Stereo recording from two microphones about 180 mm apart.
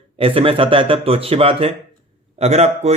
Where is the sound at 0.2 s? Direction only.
30° right (ahead or behind).